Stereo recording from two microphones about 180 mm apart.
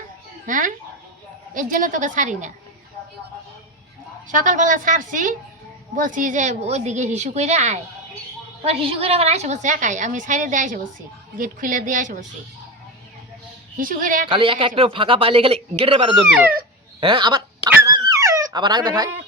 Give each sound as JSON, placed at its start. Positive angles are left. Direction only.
{"t": 0.4, "sound": "a woman's voice", "side_deg": -45}
{"t": 4.3, "sound": "a woman's voice", "side_deg": -45}
{"t": 13.7, "sound": "a woman's voice", "side_deg": -50}
{"t": 14.3, "sound": "a woman's voice", "side_deg": -30}
{"t": 17.0, "sound": "a sound", "side_deg": -25}